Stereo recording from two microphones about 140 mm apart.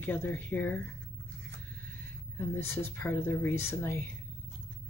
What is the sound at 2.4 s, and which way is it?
Speech, 15° left (ahead or behind).